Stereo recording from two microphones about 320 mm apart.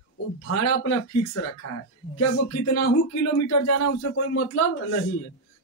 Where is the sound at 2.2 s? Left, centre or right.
Left.